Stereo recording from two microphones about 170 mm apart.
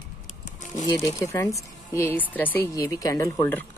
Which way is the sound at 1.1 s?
20° left (ahead or behind).